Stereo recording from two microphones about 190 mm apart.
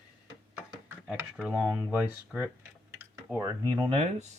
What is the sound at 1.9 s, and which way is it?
Speech, 10° right (ahead or behind).